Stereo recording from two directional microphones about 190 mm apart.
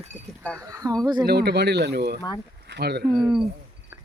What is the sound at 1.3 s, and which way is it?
Speech, 60° right (ahead or behind).